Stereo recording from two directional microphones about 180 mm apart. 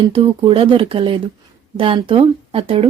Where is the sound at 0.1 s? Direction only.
30° right (ahead or behind).